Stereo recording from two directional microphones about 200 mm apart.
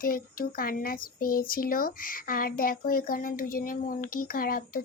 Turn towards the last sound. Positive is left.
turn(degrees=45)  # may be behind; listen again after turning